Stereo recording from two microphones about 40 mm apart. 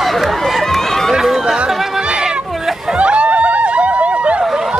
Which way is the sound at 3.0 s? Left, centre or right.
Right.